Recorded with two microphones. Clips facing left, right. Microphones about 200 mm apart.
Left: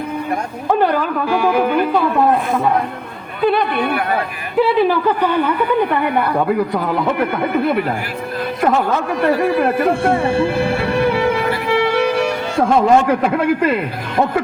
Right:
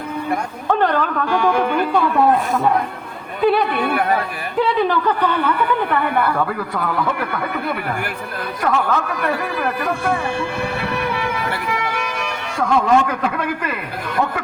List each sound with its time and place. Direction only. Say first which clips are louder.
0.7 s speech: left 2 dB; 10° left (ahead or behind)
3.4 s speech: even; 5° right (ahead or behind)
4.6 s a man's voice: left 3 dB; 10° left (ahead or behind); by 13.7 s 30° left (ahead or behind)